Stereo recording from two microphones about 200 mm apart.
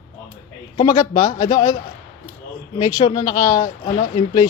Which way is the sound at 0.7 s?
20° left (ahead or behind).